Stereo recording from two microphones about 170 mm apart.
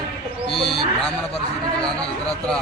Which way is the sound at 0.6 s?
35° left (ahead or behind).